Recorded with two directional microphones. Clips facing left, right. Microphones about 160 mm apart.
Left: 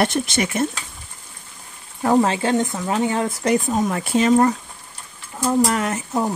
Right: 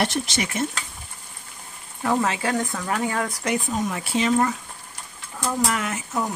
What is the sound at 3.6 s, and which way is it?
Speech, 50° left (ahead or behind).